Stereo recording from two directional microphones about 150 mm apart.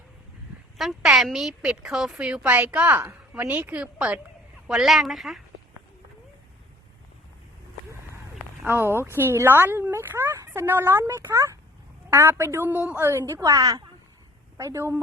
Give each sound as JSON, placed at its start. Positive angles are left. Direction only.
{"t": 0.8, "sound": "a woman's voice", "side_deg": 0}
{"t": 8.6, "sound": "a woman's voice", "side_deg": -15}